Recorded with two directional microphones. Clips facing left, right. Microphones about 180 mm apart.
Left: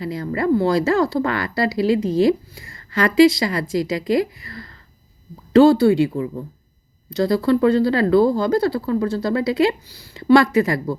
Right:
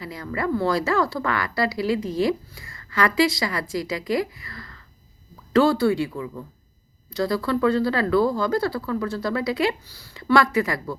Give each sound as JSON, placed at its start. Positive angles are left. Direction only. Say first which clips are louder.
{"t": 0.0, "sound": "speech", "louder": "left 6 dB", "side_deg": 30}
{"t": 6.1, "sound": "speech", "louder": "left 7 dB", "side_deg": 35}
{"t": 7.1, "sound": "speech", "louder": "left 6 dB", "side_deg": 25}